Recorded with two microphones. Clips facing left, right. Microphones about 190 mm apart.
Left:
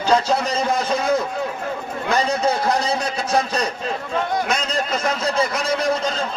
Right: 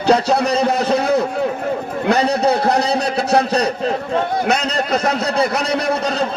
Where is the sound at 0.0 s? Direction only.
70° right (ahead or behind).